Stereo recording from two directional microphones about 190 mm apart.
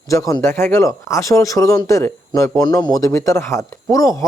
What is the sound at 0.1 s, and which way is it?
A man's voice, 15° left (ahead or behind).